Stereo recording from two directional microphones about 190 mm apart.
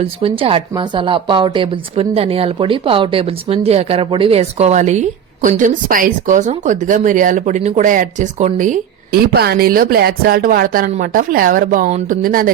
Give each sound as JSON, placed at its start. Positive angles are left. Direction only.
{"t": 0.0, "sound": "a woman's voice", "side_deg": -30}